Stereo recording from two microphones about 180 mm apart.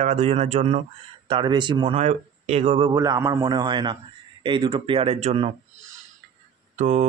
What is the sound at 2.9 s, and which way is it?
A man's voice, 20° right (ahead or behind).